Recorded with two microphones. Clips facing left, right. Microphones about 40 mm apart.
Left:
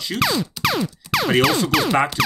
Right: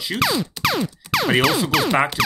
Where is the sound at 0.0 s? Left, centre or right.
Centre.